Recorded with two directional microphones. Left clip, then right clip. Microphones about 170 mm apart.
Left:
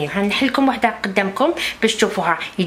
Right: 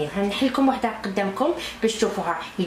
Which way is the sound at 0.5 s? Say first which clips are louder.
Left 4 dB; 15° left (ahead or behind).